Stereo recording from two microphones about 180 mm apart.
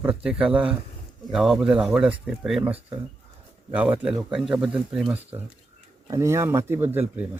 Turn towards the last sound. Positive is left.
turn(degrees=-10)  # may be behind; listen again after turning